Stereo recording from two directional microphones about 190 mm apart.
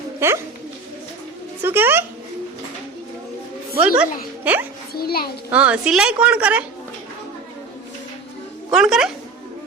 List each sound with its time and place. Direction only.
0.2 s a woman's voice: 10° right (ahead or behind)
1.6 s a woman's voice: 10° right (ahead or behind)
3.8 s a woman's voice: 5° right (ahead or behind)
4.9 s a child's voice: 55° left (ahead or behind)
5.5 s a woman's voice: 5° right (ahead or behind)
8.7 s speech: centre (ahead or behind)